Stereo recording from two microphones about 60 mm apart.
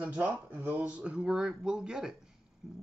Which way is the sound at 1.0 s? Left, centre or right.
Centre.